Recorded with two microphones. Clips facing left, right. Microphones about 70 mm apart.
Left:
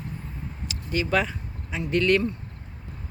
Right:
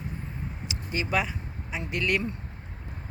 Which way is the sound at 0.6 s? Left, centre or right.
Right.